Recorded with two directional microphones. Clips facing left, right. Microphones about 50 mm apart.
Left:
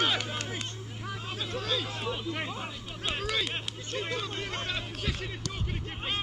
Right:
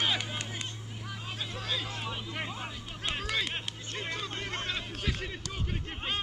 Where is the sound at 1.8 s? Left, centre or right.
Centre.